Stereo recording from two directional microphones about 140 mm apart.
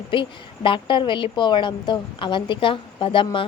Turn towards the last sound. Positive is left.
turn(degrees=35)  # may be behind; listen again after turning